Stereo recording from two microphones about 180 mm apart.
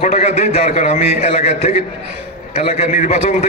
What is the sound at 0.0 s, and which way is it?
A man's voice, 40° left (ahead or behind).